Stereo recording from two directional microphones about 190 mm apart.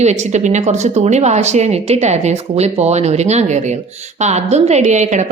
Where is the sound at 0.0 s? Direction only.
35° right (ahead or behind).